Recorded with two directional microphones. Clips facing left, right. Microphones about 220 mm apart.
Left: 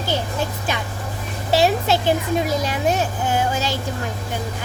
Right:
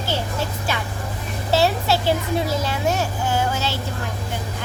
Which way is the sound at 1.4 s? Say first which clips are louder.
Left 2 dB; 15° left (ahead or behind).